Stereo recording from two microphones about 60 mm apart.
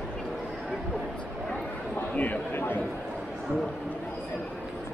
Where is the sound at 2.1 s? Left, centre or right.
Left.